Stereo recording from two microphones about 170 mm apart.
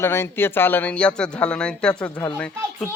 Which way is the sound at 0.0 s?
15° left (ahead or behind).